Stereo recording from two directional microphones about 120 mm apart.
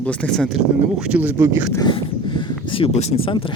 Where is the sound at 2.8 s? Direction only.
50° left (ahead or behind).